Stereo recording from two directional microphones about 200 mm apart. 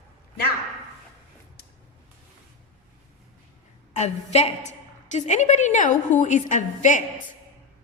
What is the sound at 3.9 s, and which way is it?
A woman's voice, 35° left (ahead or behind).